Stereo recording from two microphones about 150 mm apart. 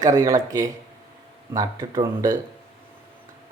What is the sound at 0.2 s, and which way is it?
Speech, 20° right (ahead or behind).